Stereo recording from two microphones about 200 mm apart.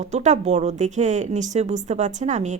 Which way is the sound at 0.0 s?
35° right (ahead or behind).